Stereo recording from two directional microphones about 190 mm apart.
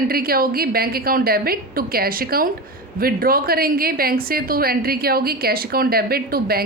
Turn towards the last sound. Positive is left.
turn(degrees=-55)  # may be behind; listen again after turning